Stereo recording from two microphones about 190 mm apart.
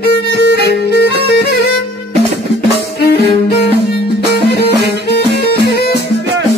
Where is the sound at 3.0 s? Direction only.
60° left (ahead or behind).